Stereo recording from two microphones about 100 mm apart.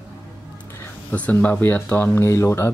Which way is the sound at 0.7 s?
15° left (ahead or behind).